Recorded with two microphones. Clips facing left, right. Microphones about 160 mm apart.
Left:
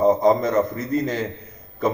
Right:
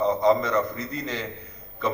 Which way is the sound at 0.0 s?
45° left (ahead or behind).